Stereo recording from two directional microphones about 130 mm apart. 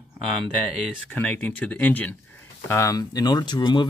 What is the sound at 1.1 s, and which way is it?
Speech, 10° left (ahead or behind).